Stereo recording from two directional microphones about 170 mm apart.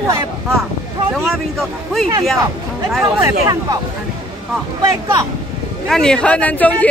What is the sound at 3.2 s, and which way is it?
Speech, 20° right (ahead or behind).